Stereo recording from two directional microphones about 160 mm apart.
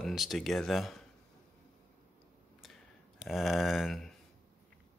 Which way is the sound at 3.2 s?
Centre (ahead or behind).